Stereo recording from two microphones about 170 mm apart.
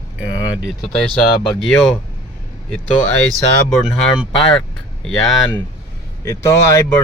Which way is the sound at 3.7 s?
5° left (ahead or behind).